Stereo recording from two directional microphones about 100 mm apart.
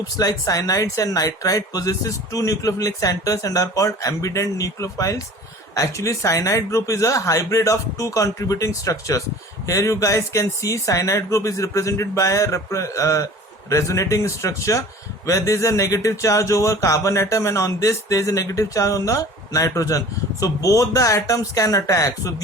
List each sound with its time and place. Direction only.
0.2 s speech: 35° left (ahead or behind)